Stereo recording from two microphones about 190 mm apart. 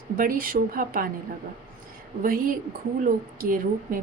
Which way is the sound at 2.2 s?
50° right (ahead or behind).